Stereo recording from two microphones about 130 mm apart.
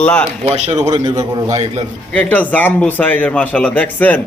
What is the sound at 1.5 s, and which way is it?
Speech, 60° right (ahead or behind).